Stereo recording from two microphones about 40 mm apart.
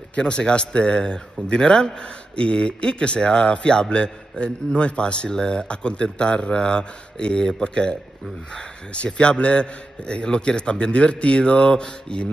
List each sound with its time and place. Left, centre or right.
0.2 s a man's voice: left
8.9 s a man's voice: left